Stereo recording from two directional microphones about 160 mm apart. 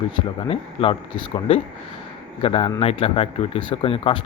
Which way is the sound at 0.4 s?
35° left (ahead or behind).